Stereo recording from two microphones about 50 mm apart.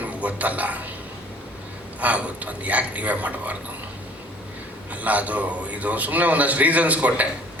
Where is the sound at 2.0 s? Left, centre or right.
Right.